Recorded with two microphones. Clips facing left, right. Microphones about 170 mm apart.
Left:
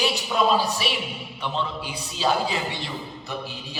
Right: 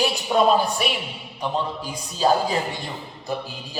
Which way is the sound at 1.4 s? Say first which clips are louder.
Right 3 dB; 40° right (ahead or behind).